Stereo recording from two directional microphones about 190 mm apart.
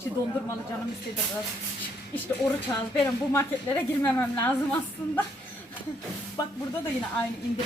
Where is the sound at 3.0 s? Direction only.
10° left (ahead or behind).